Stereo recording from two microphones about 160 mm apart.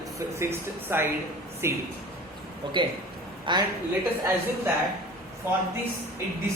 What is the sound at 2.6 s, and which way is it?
A man's voice, 30° right (ahead or behind).